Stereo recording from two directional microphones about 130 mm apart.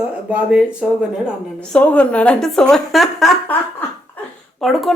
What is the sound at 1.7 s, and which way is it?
A woman's voice, 10° left (ahead or behind).